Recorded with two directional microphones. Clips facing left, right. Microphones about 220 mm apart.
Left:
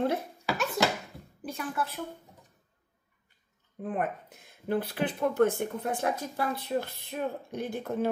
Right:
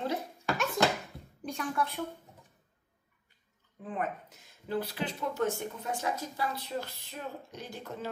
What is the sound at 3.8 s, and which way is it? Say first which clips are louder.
Speech: left 4 dB; 55° left (ahead or behind).